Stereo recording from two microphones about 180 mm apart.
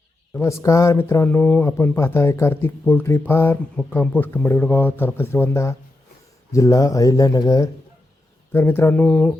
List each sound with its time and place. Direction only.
0.3 s speech: 15° left (ahead or behind)